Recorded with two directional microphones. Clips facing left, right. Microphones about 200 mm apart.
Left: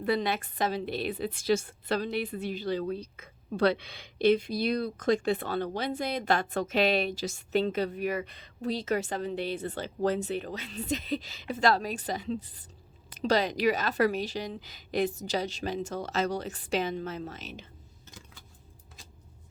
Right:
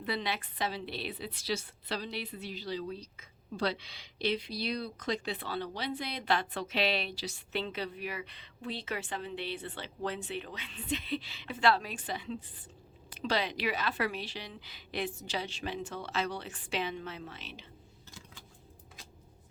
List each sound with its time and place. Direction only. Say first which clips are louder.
0.0 s a woman's voice: left 7 dB; 45° left (ahead or behind)